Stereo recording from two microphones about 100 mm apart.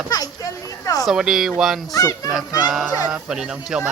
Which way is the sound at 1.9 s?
35° left (ahead or behind).